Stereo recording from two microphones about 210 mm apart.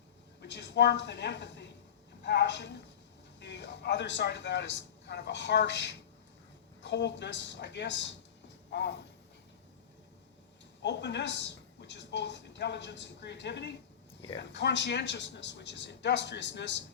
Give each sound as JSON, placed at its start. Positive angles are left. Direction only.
{"t": 0.4, "sound": "a man's voice", "side_deg": 55}
{"t": 8.7, "sound": "a sound", "side_deg": 55}
{"t": 10.8, "sound": "speech", "side_deg": 55}